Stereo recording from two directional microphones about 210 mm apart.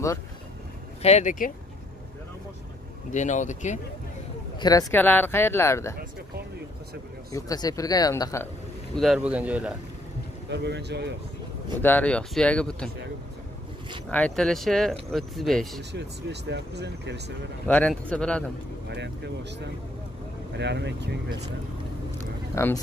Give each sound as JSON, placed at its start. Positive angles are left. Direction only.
{"t": 1.0, "sound": "speech", "side_deg": 35}
{"t": 3.1, "sound": "speech", "side_deg": 35}
{"t": 4.6, "sound": "speech", "side_deg": 15}
{"t": 7.3, "sound": "speech", "side_deg": 15}
{"t": 8.9, "sound": "speech", "side_deg": 0}
{"t": 10.5, "sound": "speech", "side_deg": -55}
{"t": 11.8, "sound": "speech", "side_deg": 10}
{"t": 14.1, "sound": "speech", "side_deg": 5}
{"t": 15.9, "sound": "speech", "side_deg": -55}
{"t": 17.6, "sound": "speech", "side_deg": 5}
{"t": 18.9, "sound": "speech", "side_deg": -55}
{"t": 22.6, "sound": "speech", "side_deg": 15}